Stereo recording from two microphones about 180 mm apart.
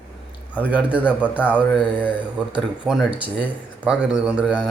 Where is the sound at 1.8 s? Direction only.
10° left (ahead or behind).